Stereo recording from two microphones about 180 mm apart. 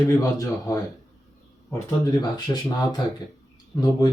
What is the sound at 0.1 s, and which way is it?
Speech, 15° left (ahead or behind).